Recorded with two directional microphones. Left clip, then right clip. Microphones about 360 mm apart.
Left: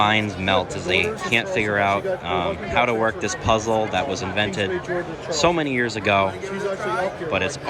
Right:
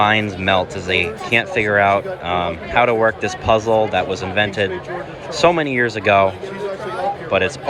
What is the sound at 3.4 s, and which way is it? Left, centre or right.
Speech, centre.